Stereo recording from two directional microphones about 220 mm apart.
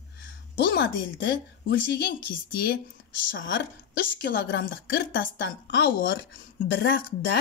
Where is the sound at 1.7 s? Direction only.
50° left (ahead or behind).